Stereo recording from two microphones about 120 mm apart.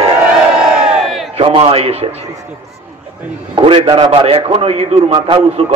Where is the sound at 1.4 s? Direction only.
50° right (ahead or behind).